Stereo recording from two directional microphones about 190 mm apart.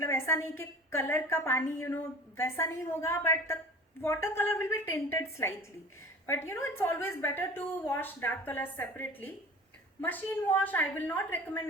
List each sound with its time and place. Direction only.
0.0 s a woman's voice: 15° left (ahead or behind)